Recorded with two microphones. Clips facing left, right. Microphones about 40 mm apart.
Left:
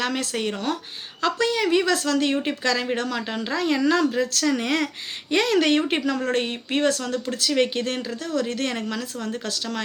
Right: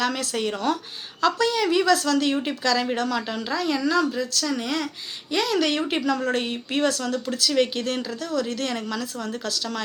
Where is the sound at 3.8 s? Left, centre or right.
Left.